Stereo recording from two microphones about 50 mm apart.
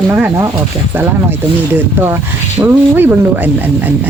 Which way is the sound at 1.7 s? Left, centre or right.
Right.